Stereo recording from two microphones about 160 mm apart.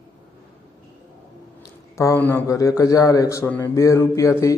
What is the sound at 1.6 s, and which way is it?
A man's voice, 20° left (ahead or behind).